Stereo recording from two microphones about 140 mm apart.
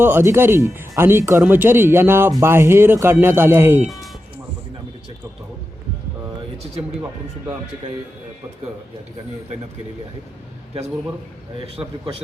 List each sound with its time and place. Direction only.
0.0 s speech: 15° right (ahead or behind)